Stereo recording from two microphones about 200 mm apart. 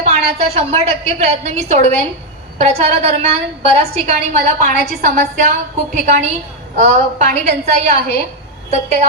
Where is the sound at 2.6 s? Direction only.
35° right (ahead or behind).